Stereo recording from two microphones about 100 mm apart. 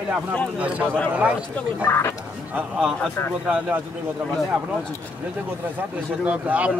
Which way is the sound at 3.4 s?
10° right (ahead or behind).